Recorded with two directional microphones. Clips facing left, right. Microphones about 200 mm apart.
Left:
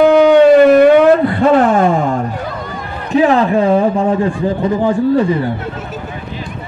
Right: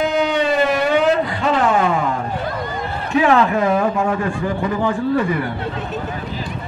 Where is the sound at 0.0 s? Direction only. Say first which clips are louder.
Left 11 dB; 55° left (ahead or behind).